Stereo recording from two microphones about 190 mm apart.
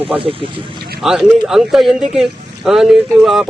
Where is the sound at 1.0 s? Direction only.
Centre (ahead or behind).